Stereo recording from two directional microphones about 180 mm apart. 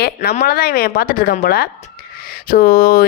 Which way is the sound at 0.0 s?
60° left (ahead or behind).